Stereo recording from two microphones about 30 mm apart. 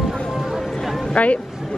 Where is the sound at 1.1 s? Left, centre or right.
Left.